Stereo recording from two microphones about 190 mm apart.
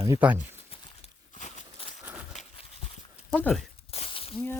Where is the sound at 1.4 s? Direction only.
40° left (ahead or behind).